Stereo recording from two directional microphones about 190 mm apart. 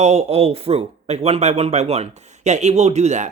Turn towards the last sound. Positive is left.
turn(degrees=-40)  # may be behind; listen again after turning